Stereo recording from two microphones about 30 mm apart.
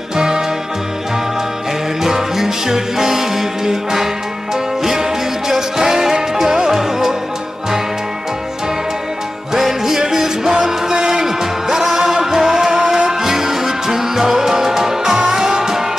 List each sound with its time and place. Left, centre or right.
0.1 s music: centre
2.0 s music: centre
5.5 s music: centre
9.5 s music: centre